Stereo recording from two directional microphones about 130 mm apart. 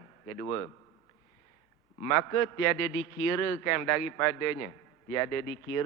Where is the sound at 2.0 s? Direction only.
20° left (ahead or behind).